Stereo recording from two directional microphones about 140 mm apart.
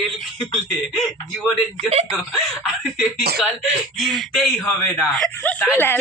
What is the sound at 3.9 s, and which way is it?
Speech, centre (ahead or behind).